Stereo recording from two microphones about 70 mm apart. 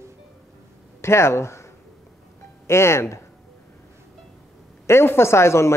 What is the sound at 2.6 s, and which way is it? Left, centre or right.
Speech, left.